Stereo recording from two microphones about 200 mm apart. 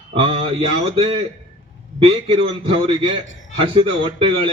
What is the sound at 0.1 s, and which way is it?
A man's voice, 30° right (ahead or behind).